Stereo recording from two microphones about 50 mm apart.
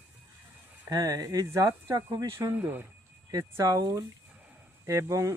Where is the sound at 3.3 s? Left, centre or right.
Right.